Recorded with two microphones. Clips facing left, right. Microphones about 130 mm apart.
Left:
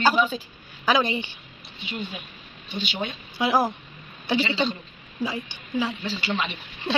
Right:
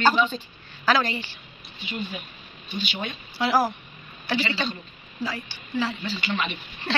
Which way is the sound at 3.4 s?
15° left (ahead or behind).